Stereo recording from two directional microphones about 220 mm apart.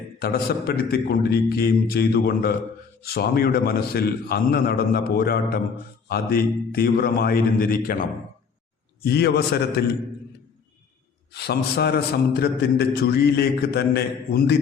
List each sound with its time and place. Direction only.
0.2 s a man's voice: 45° left (ahead or behind)
11.3 s a man's voice: 50° left (ahead or behind)